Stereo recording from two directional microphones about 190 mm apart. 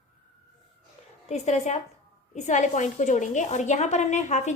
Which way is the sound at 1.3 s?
35° left (ahead or behind).